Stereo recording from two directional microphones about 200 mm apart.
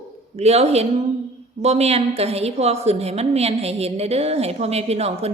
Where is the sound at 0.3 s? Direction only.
30° right (ahead or behind).